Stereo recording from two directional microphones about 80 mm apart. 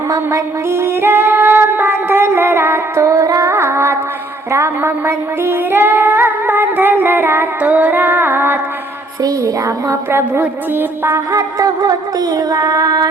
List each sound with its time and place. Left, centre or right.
0.1 s child singing: right
4.5 s music: right
7.6 s music: centre
9.2 s a sound: right
10.8 s music: right
11.3 s music: right